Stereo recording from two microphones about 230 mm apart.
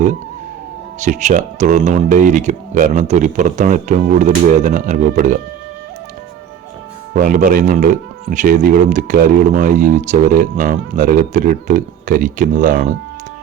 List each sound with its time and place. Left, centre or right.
0.9 s speech: right
7.1 s speech: right